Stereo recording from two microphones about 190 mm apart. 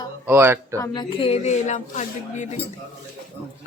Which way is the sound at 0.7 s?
20° left (ahead or behind).